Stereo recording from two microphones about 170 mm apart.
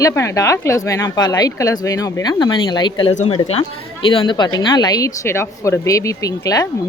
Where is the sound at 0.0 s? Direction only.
15° left (ahead or behind).